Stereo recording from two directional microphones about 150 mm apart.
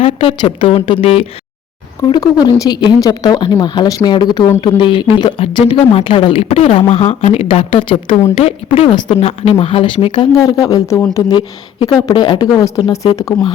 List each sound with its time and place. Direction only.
0.0 s speech: 40° left (ahead or behind)
2.0 s speech: 30° left (ahead or behind)
10.3 s speech: 25° left (ahead or behind)